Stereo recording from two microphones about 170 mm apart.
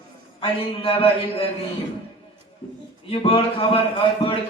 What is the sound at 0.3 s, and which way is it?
Speech, 30° left (ahead or behind).